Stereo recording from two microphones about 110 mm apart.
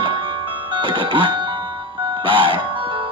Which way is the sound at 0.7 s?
50° right (ahead or behind).